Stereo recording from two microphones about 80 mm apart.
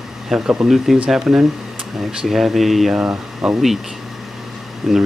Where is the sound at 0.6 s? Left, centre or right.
Centre.